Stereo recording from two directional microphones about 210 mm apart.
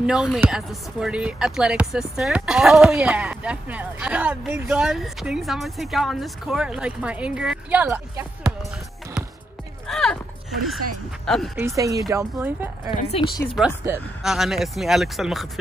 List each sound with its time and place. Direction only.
0.0 s speech: centre (ahead or behind)
9.8 s a sound: centre (ahead or behind)
11.2 s speech: centre (ahead or behind)
11.6 s speech: 15° right (ahead or behind)